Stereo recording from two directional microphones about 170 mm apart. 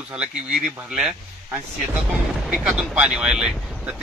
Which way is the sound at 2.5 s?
5° right (ahead or behind).